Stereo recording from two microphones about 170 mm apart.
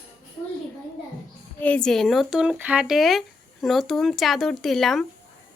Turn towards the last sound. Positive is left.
turn(degrees=0)  # may be behind; listen again after turning